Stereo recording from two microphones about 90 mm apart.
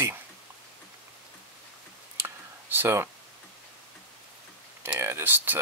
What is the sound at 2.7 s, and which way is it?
Speech, 25° right (ahead or behind).